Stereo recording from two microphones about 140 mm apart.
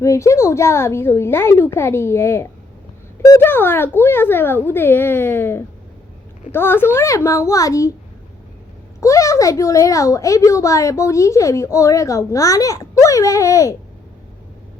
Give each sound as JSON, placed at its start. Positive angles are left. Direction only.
{"t": 0.0, "sound": "a woman's voice", "side_deg": 20}
{"t": 9.0, "sound": "a woman's voice", "side_deg": 20}